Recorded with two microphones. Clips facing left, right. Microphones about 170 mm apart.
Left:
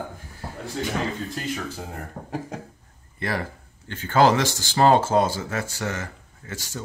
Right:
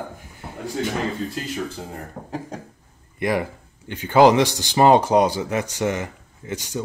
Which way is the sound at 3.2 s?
15° right (ahead or behind).